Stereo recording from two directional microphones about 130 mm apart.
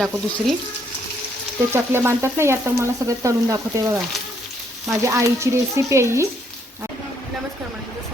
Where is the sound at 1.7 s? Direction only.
20° right (ahead or behind).